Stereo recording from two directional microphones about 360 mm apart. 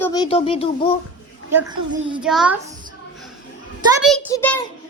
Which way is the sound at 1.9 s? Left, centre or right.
Centre.